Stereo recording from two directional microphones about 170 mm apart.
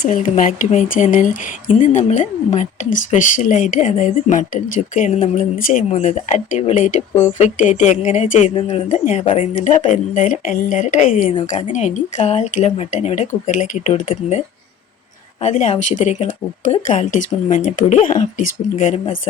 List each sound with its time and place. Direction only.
0.0 s speech: 50° left (ahead or behind)
5.9 s speech: 40° left (ahead or behind)
8.5 s speech: 30° left (ahead or behind)
9.6 s speech: 45° left (ahead or behind)